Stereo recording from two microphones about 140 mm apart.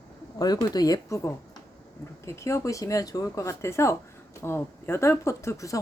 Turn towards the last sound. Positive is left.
turn(degrees=20)  # may be behind; listen again after turning